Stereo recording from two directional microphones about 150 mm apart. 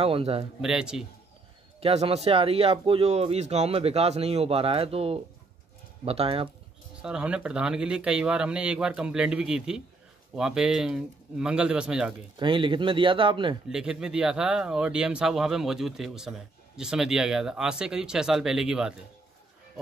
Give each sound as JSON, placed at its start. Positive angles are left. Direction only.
{"t": 0.0, "sound": "speech", "side_deg": -40}
{"t": 0.6, "sound": "speech", "side_deg": -5}
{"t": 1.8, "sound": "speech", "side_deg": -40}
{"t": 7.0, "sound": "a man's voice", "side_deg": -5}
{"t": 12.4, "sound": "speech", "side_deg": -35}
{"t": 13.7, "sound": "speech", "side_deg": -5}